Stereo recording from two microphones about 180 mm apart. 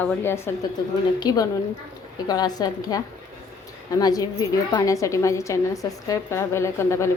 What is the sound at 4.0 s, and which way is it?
A woman's voice, 20° left (ahead or behind).